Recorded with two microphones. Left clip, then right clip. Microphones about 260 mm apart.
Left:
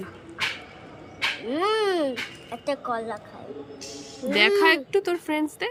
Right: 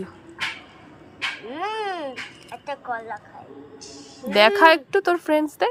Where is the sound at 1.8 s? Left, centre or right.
Centre.